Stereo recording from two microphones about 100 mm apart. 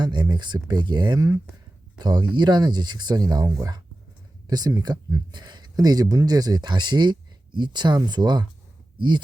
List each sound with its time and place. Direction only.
0.0 s speech: 50° right (ahead or behind)